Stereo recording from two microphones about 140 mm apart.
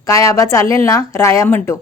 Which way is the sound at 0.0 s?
20° left (ahead or behind).